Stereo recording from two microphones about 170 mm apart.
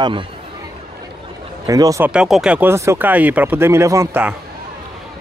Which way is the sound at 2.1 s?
5° right (ahead or behind).